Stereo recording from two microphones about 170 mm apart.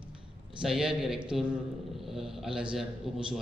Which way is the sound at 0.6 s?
Centre (ahead or behind).